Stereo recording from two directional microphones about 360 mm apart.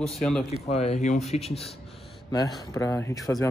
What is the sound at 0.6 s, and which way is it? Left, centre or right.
A man's voice, centre.